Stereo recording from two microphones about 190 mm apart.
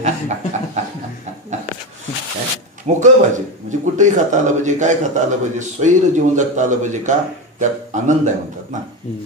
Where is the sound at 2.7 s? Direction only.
40° right (ahead or behind).